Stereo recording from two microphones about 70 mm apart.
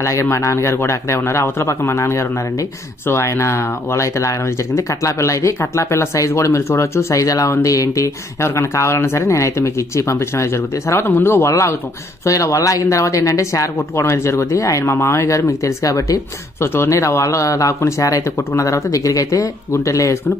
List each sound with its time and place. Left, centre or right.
0.0 s speech: left
8.5 s speech: left
16.6 s speech: left